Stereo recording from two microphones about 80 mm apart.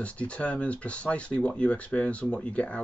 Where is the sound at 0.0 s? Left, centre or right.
Centre.